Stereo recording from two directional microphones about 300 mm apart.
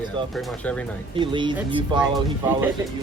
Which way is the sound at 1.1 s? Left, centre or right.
Centre.